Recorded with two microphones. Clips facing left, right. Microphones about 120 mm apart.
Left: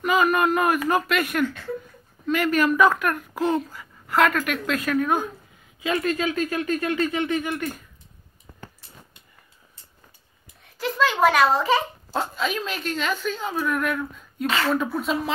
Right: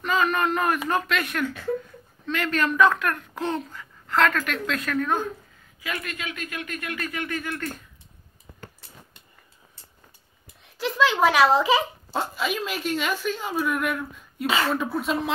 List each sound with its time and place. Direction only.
0.0 s a sound: 10° left (ahead or behind)
0.8 s a child's voice: 5° left (ahead or behind)
5.8 s speech: 25° left (ahead or behind); by 7.8 s 10° left (ahead or behind)
10.8 s a child's voice: centre (ahead or behind)